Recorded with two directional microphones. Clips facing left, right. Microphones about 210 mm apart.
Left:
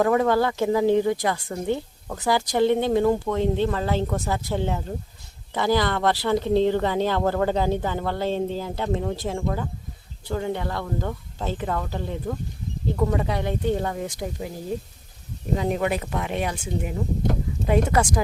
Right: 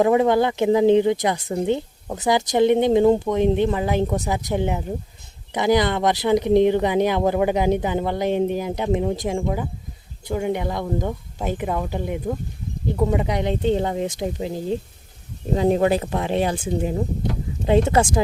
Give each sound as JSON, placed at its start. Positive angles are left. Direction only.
{"t": 0.0, "sound": "speech", "side_deg": -20}